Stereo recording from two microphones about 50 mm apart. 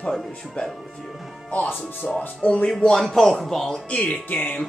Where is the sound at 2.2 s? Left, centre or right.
Left.